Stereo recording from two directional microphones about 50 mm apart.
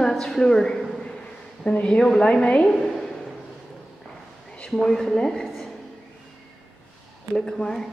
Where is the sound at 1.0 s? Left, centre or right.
Left.